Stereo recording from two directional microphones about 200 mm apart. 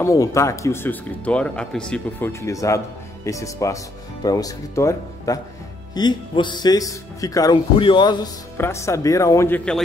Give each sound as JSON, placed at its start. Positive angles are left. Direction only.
{"t": 0.0, "sound": "speech", "side_deg": 15}